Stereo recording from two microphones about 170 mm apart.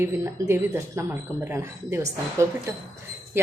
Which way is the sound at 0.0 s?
15° right (ahead or behind).